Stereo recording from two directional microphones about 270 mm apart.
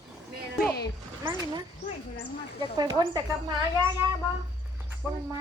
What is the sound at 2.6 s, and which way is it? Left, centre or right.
Speech, centre.